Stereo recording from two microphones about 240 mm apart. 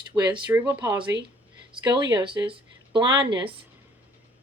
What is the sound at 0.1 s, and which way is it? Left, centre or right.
Speech, centre.